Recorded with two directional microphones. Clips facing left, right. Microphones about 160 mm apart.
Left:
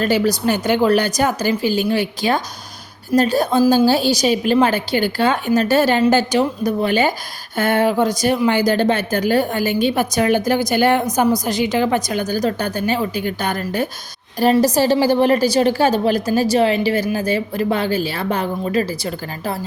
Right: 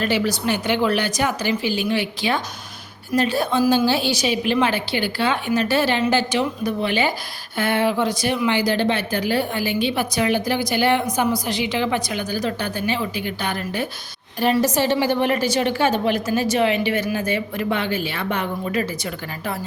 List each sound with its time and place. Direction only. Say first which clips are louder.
0.0 s a woman's voice: left 4 dB; 40° left (ahead or behind)